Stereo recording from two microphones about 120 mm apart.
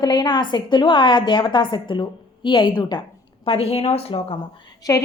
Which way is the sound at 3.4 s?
55° left (ahead or behind).